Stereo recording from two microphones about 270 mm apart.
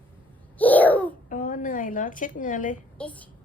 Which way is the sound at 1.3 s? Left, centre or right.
Left.